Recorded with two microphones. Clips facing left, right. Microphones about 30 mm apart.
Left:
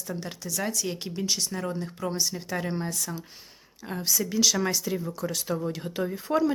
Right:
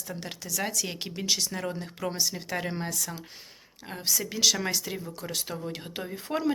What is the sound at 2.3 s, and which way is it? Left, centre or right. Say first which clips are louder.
Speech: left 2 dB; right.